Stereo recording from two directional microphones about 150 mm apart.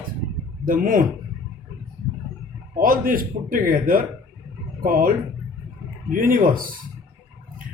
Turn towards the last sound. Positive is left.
turn(degrees=-70)  # may be behind; listen again after turning